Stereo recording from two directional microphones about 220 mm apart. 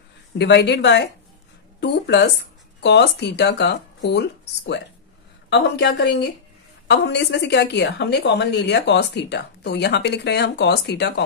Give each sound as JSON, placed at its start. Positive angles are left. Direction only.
{"t": 0.4, "sound": "a woman's voice", "side_deg": 50}